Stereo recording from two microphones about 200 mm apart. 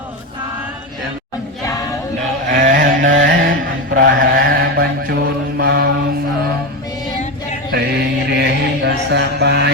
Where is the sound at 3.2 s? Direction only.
65° right (ahead or behind).